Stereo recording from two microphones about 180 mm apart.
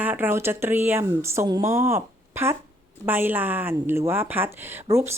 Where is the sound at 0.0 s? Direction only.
10° right (ahead or behind).